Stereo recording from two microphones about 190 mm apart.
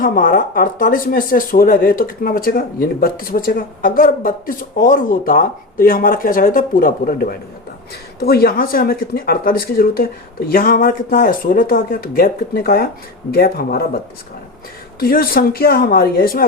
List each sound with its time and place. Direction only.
0.0 s speech: 45° left (ahead or behind)